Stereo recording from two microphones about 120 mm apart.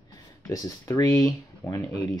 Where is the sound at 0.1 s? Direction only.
30° left (ahead or behind).